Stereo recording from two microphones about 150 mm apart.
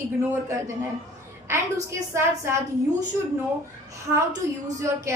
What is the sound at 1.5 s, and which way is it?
Speech, 15° right (ahead or behind).